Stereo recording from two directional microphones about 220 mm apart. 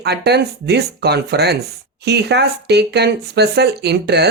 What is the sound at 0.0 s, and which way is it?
Speech, 50° right (ahead or behind).